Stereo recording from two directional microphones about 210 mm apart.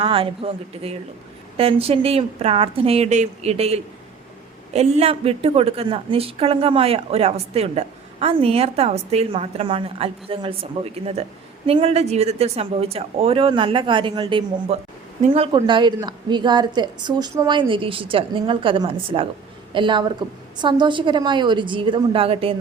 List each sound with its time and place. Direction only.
0.0 s a woman's voice: 25° right (ahead or behind)